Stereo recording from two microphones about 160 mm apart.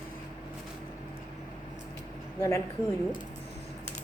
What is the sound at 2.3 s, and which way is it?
Speech, 20° left (ahead or behind).